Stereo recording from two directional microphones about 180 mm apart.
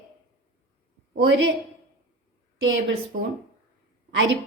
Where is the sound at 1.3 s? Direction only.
90° right.